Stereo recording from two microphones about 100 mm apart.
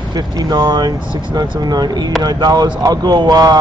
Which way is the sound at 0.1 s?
45° right (ahead or behind).